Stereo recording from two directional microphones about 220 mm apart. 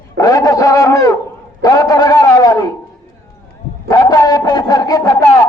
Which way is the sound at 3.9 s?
15° left (ahead or behind).